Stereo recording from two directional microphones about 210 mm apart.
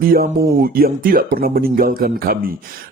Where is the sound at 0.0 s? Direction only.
45° right (ahead or behind).